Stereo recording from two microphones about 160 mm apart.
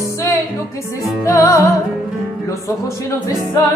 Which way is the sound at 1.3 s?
20° left (ahead or behind).